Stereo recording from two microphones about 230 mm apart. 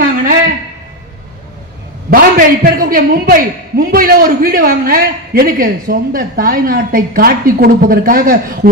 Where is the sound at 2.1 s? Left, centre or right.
Right.